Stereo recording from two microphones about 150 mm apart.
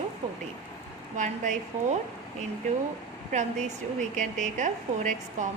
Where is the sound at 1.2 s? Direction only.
55° right (ahead or behind).